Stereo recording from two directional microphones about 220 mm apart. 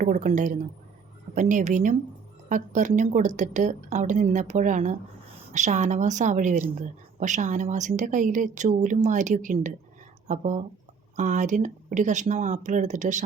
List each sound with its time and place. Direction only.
0.0 s a woman's voice: 35° right (ahead or behind)